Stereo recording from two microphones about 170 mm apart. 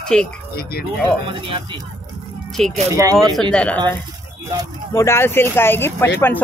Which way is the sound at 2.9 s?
20° right (ahead or behind).